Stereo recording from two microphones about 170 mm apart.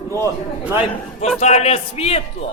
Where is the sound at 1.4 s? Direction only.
40° left (ahead or behind).